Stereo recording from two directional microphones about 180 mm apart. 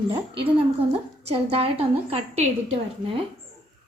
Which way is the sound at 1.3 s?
35° right (ahead or behind).